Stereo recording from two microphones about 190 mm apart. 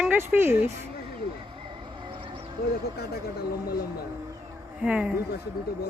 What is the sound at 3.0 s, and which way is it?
Speech, 55° left (ahead or behind).